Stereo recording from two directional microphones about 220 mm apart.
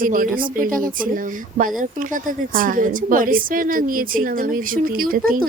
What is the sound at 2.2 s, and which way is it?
A woman's voice, 40° right (ahead or behind).